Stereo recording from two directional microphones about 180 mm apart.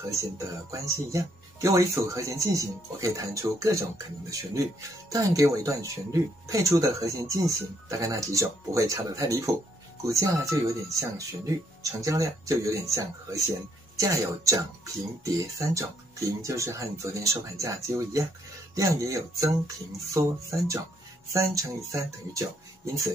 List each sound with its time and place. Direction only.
0.1 s speech: 15° right (ahead or behind)